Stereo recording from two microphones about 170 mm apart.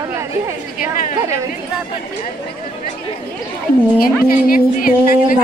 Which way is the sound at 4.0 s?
55° left (ahead or behind).